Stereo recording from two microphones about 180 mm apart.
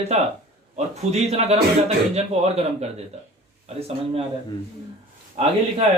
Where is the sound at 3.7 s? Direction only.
35° right (ahead or behind).